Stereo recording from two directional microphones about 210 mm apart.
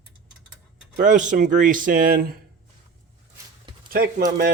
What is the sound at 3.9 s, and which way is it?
Speech, 40° right (ahead or behind).